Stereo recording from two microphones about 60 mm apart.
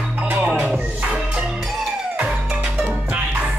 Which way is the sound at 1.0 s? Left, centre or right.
Centre.